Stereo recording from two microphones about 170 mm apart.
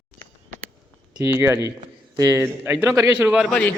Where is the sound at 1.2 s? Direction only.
15° right (ahead or behind).